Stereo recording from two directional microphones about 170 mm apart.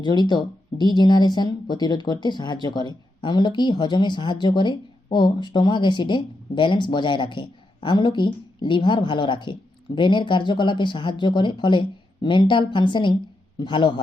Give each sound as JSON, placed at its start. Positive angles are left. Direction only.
{"t": 0.0, "sound": "speech", "side_deg": 25}